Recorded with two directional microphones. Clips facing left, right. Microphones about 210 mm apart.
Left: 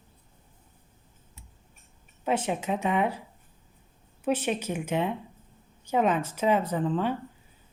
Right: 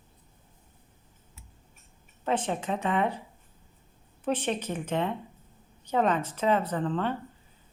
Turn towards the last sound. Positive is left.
turn(degrees=10)  # may be behind; listen again after turning